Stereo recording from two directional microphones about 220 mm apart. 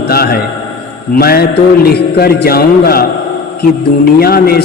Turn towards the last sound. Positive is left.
turn(degrees=45)  # may be behind; listen again after turning